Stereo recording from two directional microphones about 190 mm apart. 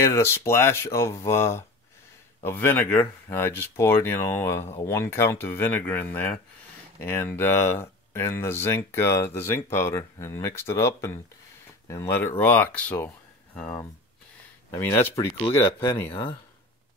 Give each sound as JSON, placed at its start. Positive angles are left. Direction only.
{"t": 0.0, "sound": "speech", "side_deg": 15}